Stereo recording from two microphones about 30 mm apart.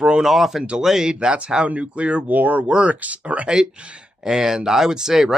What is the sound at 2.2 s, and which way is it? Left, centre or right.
Speech, right.